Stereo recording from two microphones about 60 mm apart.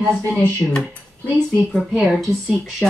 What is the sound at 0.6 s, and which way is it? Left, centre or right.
Speech, centre.